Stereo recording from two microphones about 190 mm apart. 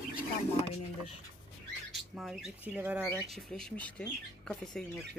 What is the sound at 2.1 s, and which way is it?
Speech, centre (ahead or behind).